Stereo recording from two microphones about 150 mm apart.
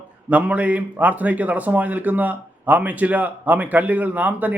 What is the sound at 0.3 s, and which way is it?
A man's voice, 10° right (ahead or behind).